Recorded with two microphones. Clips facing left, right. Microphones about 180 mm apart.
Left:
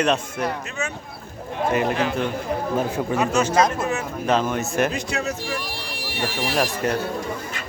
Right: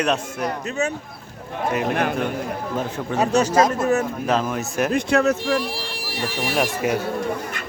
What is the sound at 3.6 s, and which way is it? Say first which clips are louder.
A man's voice: right 3 dB; centre (ahead or behind).